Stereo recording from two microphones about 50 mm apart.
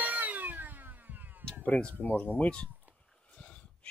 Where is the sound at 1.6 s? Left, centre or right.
Left.